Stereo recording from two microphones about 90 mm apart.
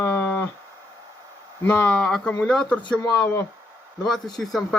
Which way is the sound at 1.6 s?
20° left (ahead or behind).